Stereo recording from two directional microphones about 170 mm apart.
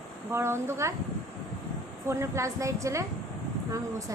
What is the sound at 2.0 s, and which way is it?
Speech, 15° right (ahead or behind).